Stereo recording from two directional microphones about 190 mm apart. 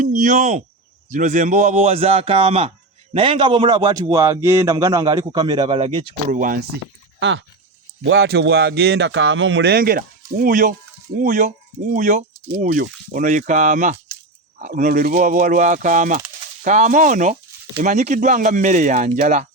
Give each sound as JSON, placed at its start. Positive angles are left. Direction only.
{"t": 0.0, "sound": "a man's voice", "side_deg": -40}
{"t": 6.3, "sound": "speech", "side_deg": -45}
{"t": 7.2, "sound": "speech", "side_deg": -75}